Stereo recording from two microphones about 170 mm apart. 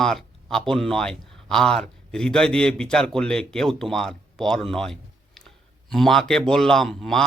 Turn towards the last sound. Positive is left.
turn(degrees=0)  # may be behind; listen again after turning